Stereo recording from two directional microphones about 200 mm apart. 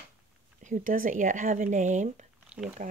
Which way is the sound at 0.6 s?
40° right (ahead or behind).